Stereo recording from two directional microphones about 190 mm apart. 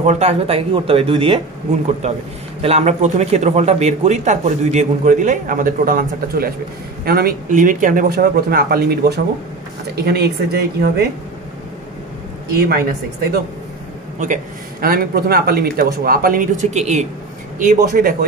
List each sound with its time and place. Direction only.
0.0 s a woman's voice: 35° right (ahead or behind); by 11.1 s 55° right (ahead or behind)
12.5 s a woman's voice: 55° right (ahead or behind)
14.2 s speech: 45° right (ahead or behind)